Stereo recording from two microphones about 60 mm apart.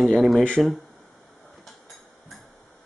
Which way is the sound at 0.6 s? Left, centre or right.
Centre.